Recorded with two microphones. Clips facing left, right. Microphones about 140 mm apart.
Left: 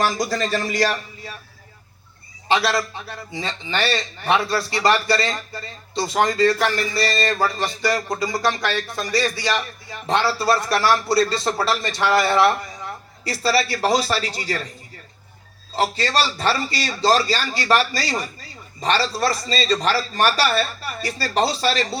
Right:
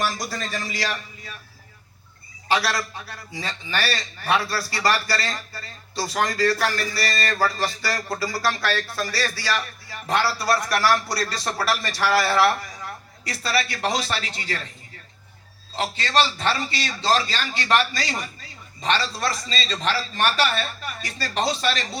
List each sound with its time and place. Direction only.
0.0 s speech: 90° left; by 0.9 s 50° left (ahead or behind)
2.5 s a man's voice: 25° left (ahead or behind)
13.2 s a man's voice: 30° left (ahead or behind)
15.7 s a man's voice: 40° left (ahead or behind)